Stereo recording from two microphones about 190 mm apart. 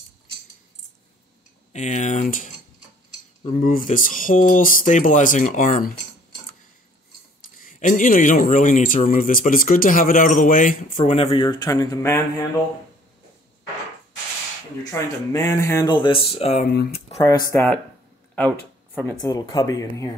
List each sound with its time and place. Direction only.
1.7 s speech: 40° left (ahead or behind)
7.6 s speech: 45° left (ahead or behind); by 12.2 s 15° left (ahead or behind)
14.8 s speech: 15° left (ahead or behind); by 16.6 s 35° left (ahead or behind)
16.6 s speech: 55° left (ahead or behind)
17.2 s speech: 15° left (ahead or behind)
19.2 s speech: 20° left (ahead or behind)